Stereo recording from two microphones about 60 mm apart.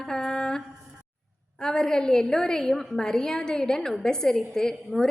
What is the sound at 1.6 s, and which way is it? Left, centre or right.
Music, centre.